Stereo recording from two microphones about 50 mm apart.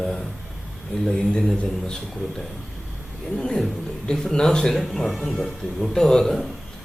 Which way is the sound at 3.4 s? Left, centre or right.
Centre.